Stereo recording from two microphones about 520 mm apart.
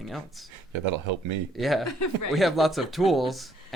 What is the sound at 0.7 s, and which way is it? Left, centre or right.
Speech, right.